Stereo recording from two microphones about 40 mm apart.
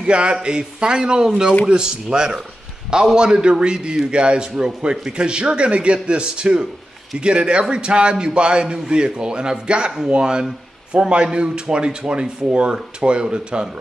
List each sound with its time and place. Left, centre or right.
0.0 s a man's voice: right